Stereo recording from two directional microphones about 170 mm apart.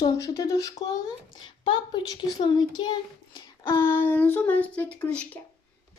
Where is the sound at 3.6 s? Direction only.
15° left (ahead or behind).